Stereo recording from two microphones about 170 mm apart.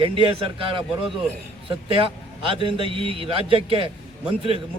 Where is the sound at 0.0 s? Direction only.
30° right (ahead or behind).